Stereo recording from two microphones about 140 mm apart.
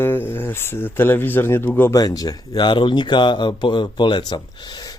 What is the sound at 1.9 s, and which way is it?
Speech, 25° left (ahead or behind).